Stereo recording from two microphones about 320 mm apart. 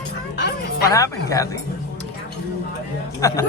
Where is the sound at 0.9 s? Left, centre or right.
Centre.